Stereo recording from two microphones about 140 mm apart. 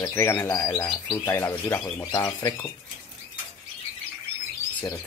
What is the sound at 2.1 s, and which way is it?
Speech, 25° left (ahead or behind).